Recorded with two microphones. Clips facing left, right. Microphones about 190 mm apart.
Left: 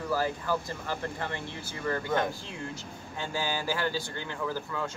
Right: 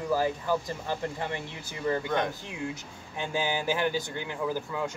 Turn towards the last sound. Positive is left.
turn(degrees=-15)  # may be behind; listen again after turning